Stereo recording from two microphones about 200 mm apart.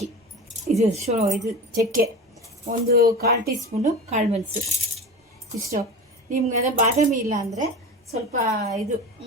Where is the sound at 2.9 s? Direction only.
50° right (ahead or behind).